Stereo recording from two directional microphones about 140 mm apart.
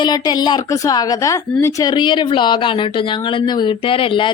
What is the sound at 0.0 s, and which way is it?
A woman's voice, 30° left (ahead or behind).